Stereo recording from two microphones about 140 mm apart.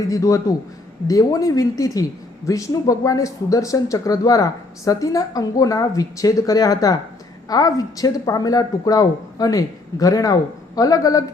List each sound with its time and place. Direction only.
0.1 s speech: 25° left (ahead or behind)